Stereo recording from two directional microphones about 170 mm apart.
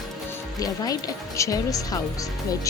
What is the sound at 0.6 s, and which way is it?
Speech, 20° left (ahead or behind).